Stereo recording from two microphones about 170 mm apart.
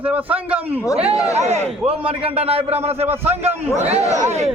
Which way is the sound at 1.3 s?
40° right (ahead or behind).